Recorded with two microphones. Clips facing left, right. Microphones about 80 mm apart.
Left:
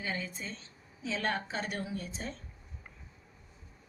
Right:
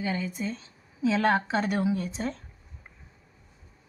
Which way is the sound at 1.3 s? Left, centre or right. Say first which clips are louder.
Right 10 dB; right.